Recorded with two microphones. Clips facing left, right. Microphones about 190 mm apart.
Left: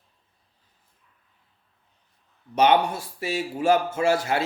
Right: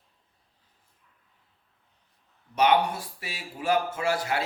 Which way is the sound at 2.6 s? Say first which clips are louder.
Left 3 dB; 25° left (ahead or behind).